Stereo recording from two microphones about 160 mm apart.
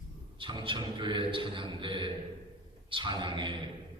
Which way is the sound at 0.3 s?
30° right (ahead or behind).